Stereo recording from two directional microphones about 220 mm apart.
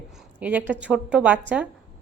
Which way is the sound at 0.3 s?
5° right (ahead or behind).